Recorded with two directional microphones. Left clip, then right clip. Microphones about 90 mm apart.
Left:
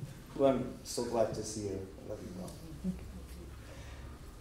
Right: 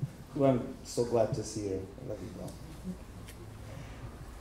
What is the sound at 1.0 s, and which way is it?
Speech, 20° right (ahead or behind).